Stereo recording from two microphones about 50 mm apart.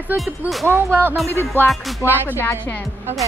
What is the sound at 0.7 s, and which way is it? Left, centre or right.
Speech, right.